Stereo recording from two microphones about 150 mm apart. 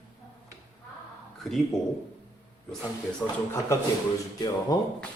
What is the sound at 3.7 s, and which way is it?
Speech, 20° left (ahead or behind).